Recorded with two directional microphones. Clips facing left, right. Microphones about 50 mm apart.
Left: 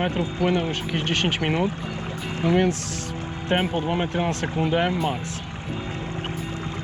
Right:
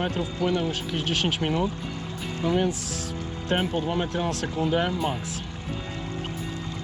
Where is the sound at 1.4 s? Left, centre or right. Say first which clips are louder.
Left 2 dB; left.